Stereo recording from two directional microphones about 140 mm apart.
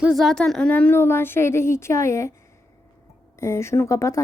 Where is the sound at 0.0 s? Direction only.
Centre (ahead or behind); by 2.3 s 20° left (ahead or behind).